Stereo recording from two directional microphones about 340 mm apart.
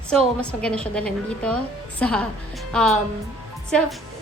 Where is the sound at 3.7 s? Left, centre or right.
Centre.